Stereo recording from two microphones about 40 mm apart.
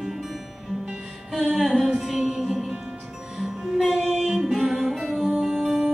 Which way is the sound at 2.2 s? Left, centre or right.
Centre.